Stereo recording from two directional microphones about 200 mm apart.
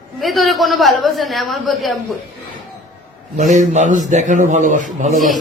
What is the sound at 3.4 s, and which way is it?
A man's voice, 35° right (ahead or behind).